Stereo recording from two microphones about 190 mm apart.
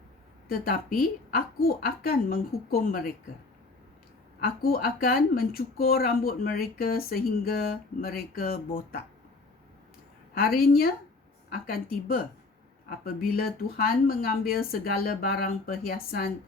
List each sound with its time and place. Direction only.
0.4 s speech: 50° left (ahead or behind)
4.4 s speech: 50° left (ahead or behind)
10.3 s speech: 50° left (ahead or behind)